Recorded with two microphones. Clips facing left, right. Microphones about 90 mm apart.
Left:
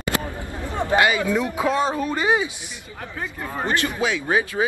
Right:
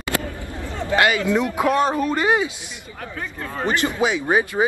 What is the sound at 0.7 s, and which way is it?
Speech, 15° left (ahead or behind).